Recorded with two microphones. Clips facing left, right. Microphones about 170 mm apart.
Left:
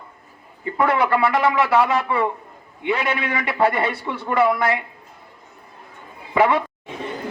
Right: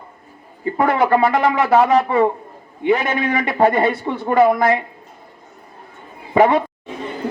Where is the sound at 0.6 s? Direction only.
25° right (ahead or behind).